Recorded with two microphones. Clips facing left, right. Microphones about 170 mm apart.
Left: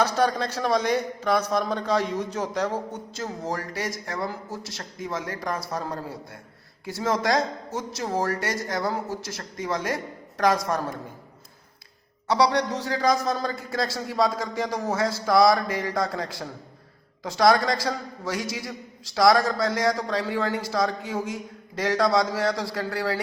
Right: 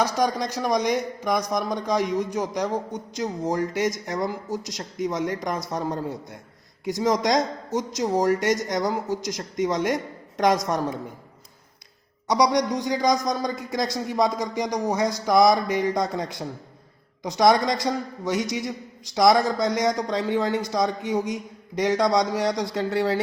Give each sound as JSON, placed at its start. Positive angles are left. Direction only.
{"t": 0.0, "sound": "a man's voice", "side_deg": -10}
{"t": 12.3, "sound": "a man's voice", "side_deg": -15}